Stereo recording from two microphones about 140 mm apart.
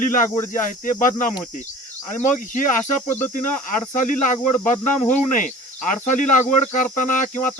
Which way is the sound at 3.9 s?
65° left (ahead or behind).